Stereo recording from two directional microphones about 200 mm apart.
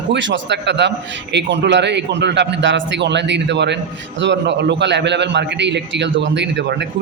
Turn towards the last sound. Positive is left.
turn(degrees=-60)  # may be behind; listen again after turning